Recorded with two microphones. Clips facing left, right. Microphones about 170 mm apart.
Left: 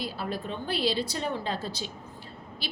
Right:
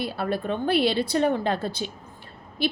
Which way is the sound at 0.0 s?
60° right (ahead or behind).